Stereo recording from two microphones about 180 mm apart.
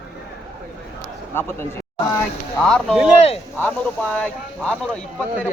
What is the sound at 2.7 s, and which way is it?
Speech, centre (ahead or behind).